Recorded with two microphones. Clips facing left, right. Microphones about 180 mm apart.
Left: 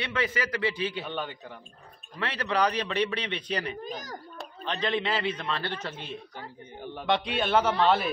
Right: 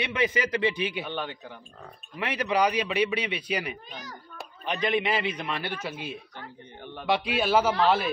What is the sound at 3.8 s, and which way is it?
Speech, 40° left (ahead or behind).